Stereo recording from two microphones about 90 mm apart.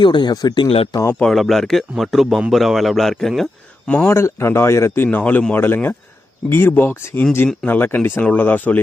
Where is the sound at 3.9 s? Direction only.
20° left (ahead or behind).